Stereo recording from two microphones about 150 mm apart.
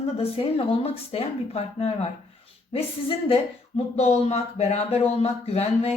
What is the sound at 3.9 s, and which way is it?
Speech, 45° left (ahead or behind).